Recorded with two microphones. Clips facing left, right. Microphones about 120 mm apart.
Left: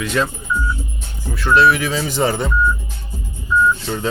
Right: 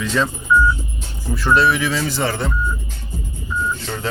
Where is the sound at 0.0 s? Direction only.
10° left (ahead or behind).